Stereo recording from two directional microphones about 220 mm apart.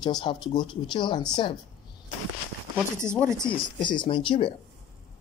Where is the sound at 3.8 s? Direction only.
20° left (ahead or behind).